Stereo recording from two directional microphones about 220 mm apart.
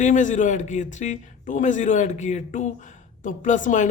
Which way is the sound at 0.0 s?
35° left (ahead or behind).